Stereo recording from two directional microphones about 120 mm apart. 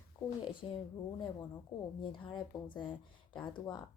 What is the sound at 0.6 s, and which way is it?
Speech, 50° left (ahead or behind).